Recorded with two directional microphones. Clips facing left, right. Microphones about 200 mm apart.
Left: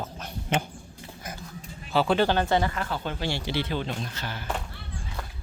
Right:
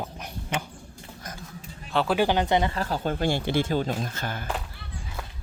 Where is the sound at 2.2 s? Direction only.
15° right (ahead or behind).